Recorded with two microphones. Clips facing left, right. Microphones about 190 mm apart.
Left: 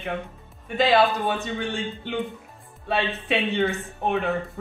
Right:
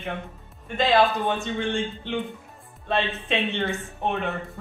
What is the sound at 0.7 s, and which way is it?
Speech, centre (ahead or behind).